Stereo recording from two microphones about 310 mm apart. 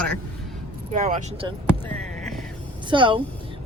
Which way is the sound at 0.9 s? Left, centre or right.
Right.